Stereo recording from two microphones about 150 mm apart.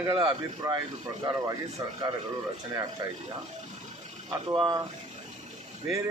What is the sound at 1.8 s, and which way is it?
Speech, 20° right (ahead or behind).